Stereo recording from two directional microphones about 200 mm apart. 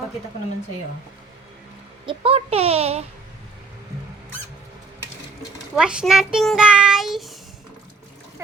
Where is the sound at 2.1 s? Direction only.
30° right (ahead or behind).